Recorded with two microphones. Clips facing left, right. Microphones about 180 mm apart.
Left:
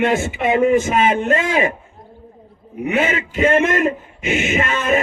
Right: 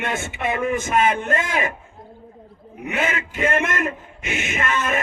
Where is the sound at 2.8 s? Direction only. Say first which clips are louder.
Left 5 dB; 25° left (ahead or behind).